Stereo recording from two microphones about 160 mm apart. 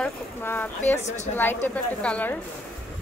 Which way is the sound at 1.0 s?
45° left (ahead or behind).